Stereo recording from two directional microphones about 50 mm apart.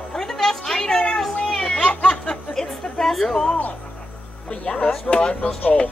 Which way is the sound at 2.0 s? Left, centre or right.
Centre.